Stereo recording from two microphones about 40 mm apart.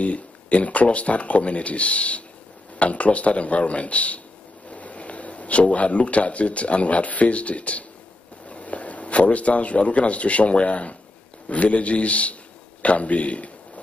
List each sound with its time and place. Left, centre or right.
0.0 s speech: left